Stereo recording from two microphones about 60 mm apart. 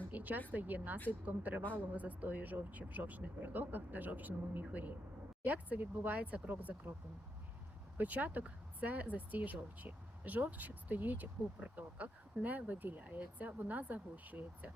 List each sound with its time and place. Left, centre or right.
0.1 s a sound: right
0.5 s speech: right
7.9 s speech: right